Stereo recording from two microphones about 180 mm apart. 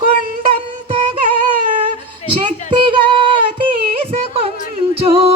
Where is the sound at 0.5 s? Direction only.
35° right (ahead or behind).